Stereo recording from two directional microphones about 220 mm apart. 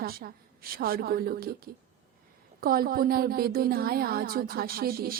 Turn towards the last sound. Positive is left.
turn(degrees=-45)  # may be behind; listen again after turning